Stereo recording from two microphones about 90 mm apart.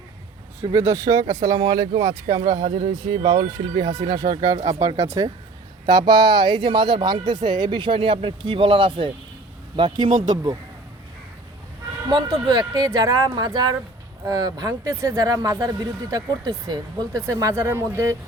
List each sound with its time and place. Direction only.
0.6 s speech: 40° right (ahead or behind); by 3.2 s 90° right
3.2 s speech: 60° right (ahead or behind); by 5.3 s 35° right (ahead or behind)
5.8 s speech: 50° right (ahead or behind); by 9.1 s 75° right (ahead or behind)
9.7 s speech: 60° right (ahead or behind)
12.0 s speech: 50° right (ahead or behind)
15.8 s speech: 50° right (ahead or behind); by 18.2 s 30° right (ahead or behind)